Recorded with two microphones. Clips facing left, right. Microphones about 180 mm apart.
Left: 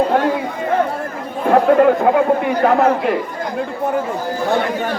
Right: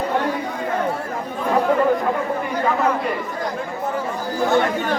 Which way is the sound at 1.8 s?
80° left.